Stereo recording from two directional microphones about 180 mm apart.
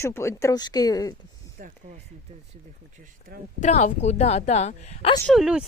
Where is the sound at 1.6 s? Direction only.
50° right (ahead or behind).